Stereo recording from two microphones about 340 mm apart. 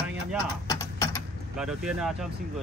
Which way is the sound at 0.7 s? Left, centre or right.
Centre.